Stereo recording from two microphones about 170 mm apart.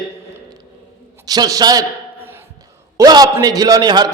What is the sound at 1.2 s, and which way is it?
Speech, 20° right (ahead or behind).